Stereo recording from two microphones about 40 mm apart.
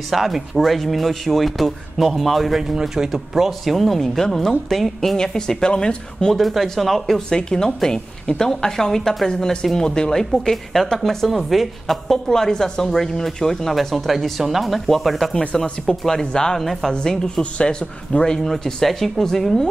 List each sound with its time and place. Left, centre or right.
0.1 s speech: centre
3.7 s speech: centre
5.1 s speech: centre
6.3 s speech: centre
7.2 s speech: centre
10.5 s speech: centre
16.5 s speech: centre
16.9 s speech: centre
18.3 s speech: centre